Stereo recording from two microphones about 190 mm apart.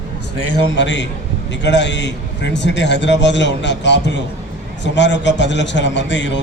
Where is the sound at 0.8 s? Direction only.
70° left (ahead or behind).